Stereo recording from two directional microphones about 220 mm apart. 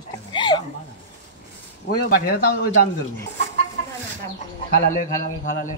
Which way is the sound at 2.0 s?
40° left (ahead or behind).